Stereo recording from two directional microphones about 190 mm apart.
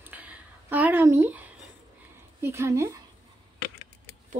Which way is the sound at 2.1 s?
15° right (ahead or behind).